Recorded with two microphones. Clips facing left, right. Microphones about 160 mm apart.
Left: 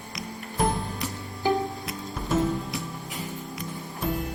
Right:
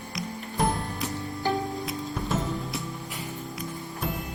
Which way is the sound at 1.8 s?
Centre (ahead or behind).